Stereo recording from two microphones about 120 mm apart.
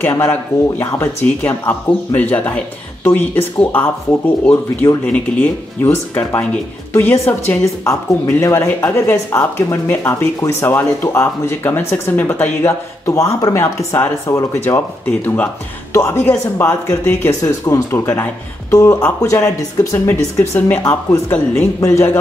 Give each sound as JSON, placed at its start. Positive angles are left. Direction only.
{"t": 0.0, "sound": "speech", "side_deg": 15}
{"t": 15.0, "sound": "speech", "side_deg": 10}